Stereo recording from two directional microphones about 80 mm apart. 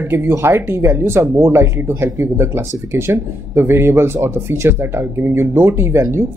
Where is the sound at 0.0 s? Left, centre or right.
Right.